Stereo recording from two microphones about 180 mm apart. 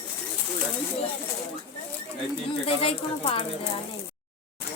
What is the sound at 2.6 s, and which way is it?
Speech, 30° left (ahead or behind).